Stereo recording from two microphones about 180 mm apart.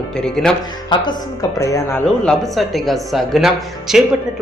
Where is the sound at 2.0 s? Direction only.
5° left (ahead or behind).